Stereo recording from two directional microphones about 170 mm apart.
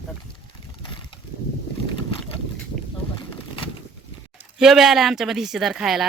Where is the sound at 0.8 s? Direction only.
30° left (ahead or behind).